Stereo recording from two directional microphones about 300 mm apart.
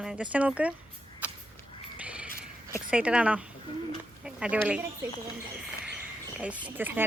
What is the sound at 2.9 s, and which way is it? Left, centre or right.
A woman's voice, centre.